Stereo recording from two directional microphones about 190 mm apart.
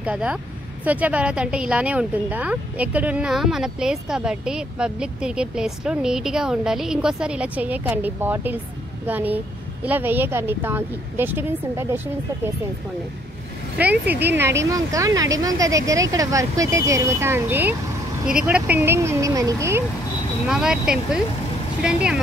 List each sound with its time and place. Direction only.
0.0 s speech: 5° right (ahead or behind)
13.7 s speech: 10° right (ahead or behind)
20.4 s speech: 5° right (ahead or behind)